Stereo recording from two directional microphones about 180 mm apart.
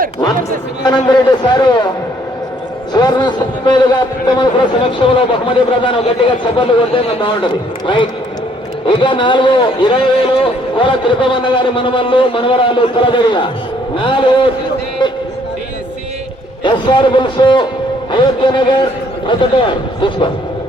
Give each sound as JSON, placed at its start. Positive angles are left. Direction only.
{"t": 0.9, "sound": "a man's voice", "side_deg": 25}
{"t": 2.9, "sound": "a man's voice", "side_deg": 20}
{"t": 16.6, "sound": "a man's voice", "side_deg": 25}